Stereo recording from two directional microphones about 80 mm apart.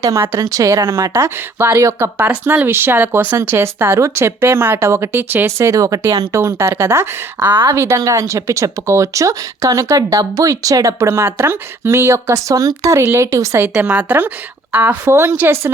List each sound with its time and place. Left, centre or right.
0.4 s speech: right
2.1 s speech: right
5.5 s speech: right
7.7 s a woman's voice: right
11.1 s speech: right
13.8 s a woman's voice: centre
15.1 s speech: right